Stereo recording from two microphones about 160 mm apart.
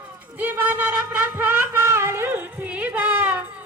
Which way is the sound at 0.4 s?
10° right (ahead or behind).